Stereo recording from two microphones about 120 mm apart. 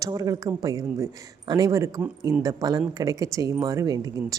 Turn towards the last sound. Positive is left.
turn(degrees=-30)  # may be behind; listen again after turning